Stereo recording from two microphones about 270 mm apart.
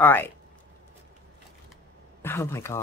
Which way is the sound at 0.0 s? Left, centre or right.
Centre.